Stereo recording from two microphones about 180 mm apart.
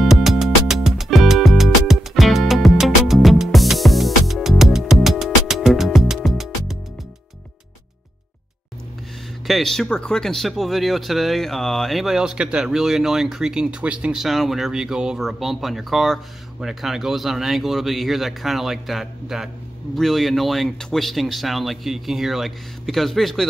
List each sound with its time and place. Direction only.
0.0 s music: centre (ahead or behind)
9.5 s speech: centre (ahead or behind)